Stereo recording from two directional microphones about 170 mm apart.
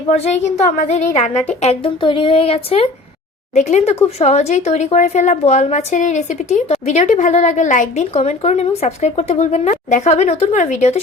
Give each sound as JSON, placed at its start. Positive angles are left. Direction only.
{"t": 0.1, "sound": "speech", "side_deg": 40}
{"t": 1.6, "sound": "a woman's voice", "side_deg": 35}